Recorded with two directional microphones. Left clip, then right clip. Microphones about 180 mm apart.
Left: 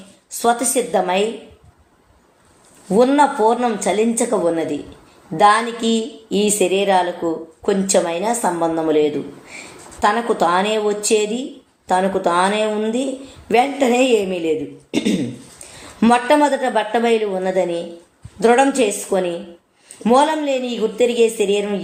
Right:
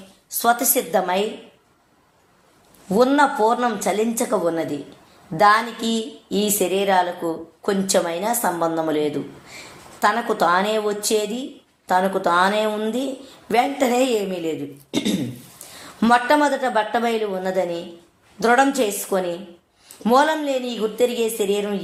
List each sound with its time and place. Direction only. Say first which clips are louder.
0.4 s a woman's voice: left 2 dB; 20° right (ahead or behind)
2.9 s a woman's voice: left 3 dB; 20° right (ahead or behind)